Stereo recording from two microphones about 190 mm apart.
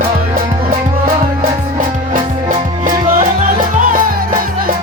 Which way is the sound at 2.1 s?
45° right (ahead or behind).